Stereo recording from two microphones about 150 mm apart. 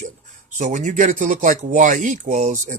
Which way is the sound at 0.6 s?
60° right (ahead or behind).